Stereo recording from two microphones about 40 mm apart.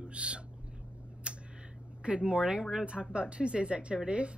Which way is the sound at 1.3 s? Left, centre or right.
Right.